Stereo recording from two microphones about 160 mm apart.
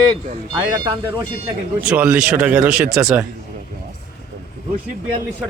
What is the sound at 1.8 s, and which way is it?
Speech, 10° right (ahead or behind).